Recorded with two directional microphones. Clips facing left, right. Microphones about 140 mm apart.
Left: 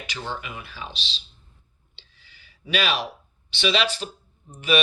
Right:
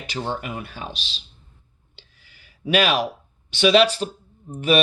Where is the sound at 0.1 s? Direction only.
40° right (ahead or behind).